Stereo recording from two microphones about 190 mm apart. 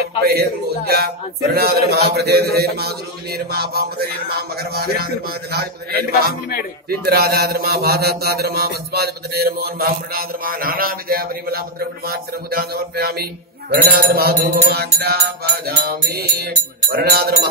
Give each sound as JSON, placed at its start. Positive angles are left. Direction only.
{"t": 0.2, "sound": "speech", "side_deg": -55}
{"t": 7.1, "sound": "mantra", "side_deg": -55}
{"t": 13.7, "sound": "speech", "side_deg": -50}